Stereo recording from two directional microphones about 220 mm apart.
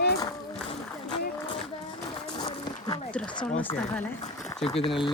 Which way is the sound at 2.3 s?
20° left (ahead or behind).